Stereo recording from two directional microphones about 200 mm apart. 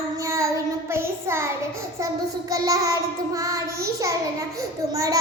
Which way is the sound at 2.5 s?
15° right (ahead or behind).